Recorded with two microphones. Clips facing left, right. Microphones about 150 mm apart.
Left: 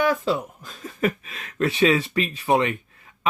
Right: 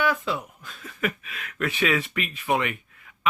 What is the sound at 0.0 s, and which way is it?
Speech, 40° left (ahead or behind).